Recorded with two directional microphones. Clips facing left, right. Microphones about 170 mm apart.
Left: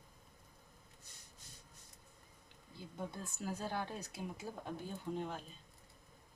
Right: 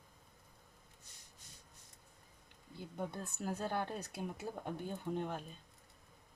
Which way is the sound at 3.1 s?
60° right (ahead or behind).